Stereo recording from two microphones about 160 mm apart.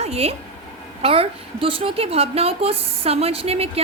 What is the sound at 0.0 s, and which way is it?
A woman's voice, 40° right (ahead or behind).